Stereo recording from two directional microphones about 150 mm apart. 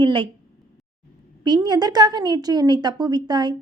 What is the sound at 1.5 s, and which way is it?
A woman's voice, 25° right (ahead or behind).